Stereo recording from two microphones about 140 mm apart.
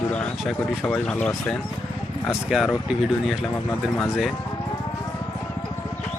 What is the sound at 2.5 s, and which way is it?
Speech, 5° right (ahead or behind).